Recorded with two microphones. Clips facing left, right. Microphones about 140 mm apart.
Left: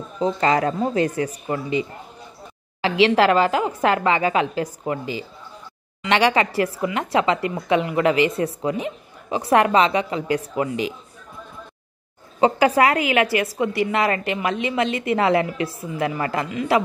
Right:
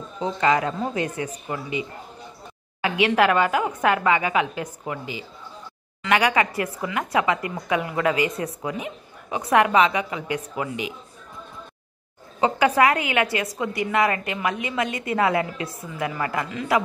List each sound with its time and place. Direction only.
0.2 s a woman's voice: 35° left (ahead or behind)
12.4 s a woman's voice: 30° left (ahead or behind)